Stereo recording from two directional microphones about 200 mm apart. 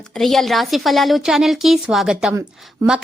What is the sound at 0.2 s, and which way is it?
A woman's voice, centre (ahead or behind).